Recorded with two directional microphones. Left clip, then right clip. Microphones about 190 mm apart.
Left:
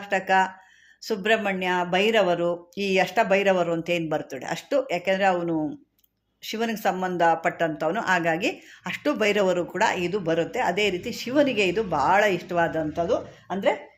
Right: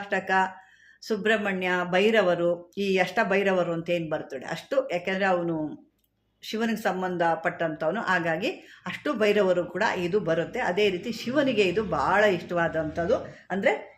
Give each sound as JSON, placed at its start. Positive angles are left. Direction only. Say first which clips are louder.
{"t": 0.0, "sound": "speech", "louder": "left 3 dB", "side_deg": 30}